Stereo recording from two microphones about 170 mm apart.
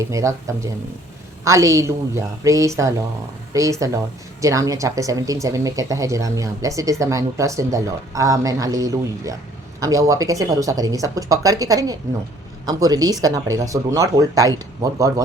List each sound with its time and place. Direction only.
0.0 s a woman's voice: 20° right (ahead or behind)